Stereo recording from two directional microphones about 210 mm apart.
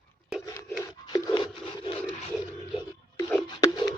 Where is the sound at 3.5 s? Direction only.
20° left (ahead or behind).